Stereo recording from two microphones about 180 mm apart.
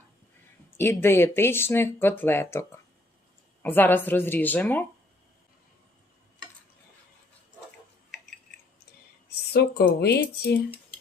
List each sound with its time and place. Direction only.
0.8 s speech: 15° left (ahead or behind)
9.3 s speech: 60° left (ahead or behind)